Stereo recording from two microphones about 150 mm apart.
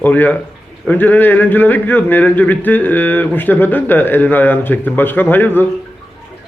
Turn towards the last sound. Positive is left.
turn(degrees=15)  # may be behind; listen again after turning